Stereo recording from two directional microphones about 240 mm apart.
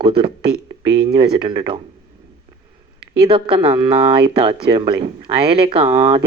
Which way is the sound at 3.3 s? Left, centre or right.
Right.